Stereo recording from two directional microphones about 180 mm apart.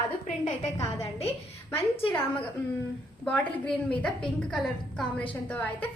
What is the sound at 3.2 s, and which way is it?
A woman's voice, 5° left (ahead or behind).